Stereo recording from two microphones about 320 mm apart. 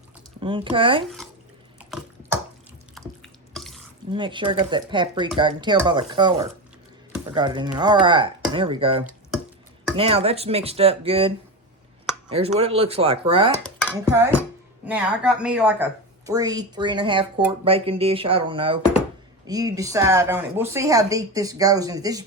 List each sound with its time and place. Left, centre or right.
0.4 s speech: centre
1.8 s drip: centre
3.5 s stir: centre
4.1 s speech: centre
7.3 s speech: centre
12.3 s speech: centre
13.6 s dishes: centre
14.0 s speech: centre